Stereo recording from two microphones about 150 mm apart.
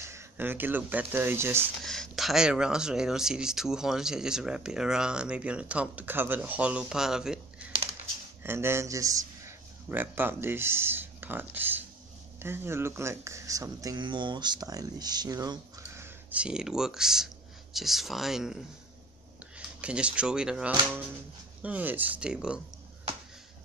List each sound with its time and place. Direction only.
0.0 s speech: 15° right (ahead or behind)
1.8 s speech: centre (ahead or behind)
8.4 s a man's voice: 15° right (ahead or behind)
16.3 s speech: 5° right (ahead or behind)